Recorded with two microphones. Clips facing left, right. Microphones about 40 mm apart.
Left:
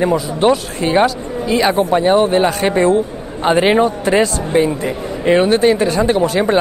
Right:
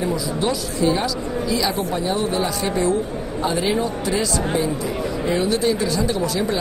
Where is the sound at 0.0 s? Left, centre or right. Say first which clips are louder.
Left 8 dB; left.